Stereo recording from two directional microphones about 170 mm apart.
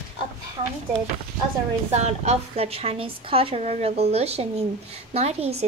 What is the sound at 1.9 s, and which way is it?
A woman's voice, 40° right (ahead or behind).